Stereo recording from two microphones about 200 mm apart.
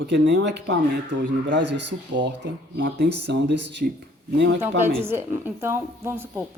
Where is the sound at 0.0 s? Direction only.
60° right (ahead or behind).